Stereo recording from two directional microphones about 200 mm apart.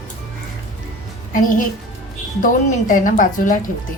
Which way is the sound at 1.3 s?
40° left (ahead or behind).